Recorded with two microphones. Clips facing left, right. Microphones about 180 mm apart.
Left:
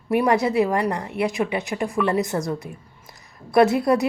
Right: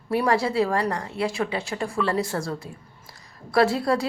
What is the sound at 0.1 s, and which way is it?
A woman's voice, 20° left (ahead or behind).